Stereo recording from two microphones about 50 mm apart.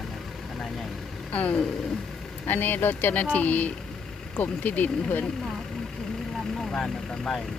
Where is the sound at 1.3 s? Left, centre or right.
Left.